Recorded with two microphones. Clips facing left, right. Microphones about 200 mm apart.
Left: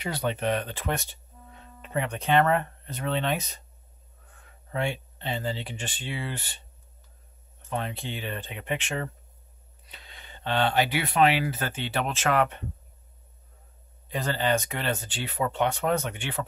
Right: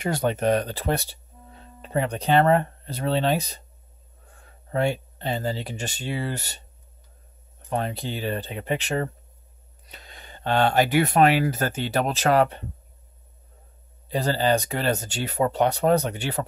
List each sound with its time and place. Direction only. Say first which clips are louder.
0.0 s speech: right 5 dB; 45° right (ahead or behind)
7.7 s speech: right 5 dB; 40° right (ahead or behind)
14.0 s speech: right 5 dB; 35° right (ahead or behind)